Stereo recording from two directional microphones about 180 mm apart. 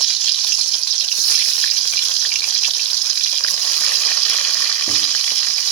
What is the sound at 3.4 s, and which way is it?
Frying, 15° left (ahead or behind).